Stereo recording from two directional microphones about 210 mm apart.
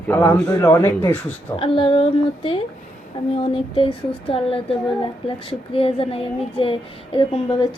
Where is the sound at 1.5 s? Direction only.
25° left (ahead or behind).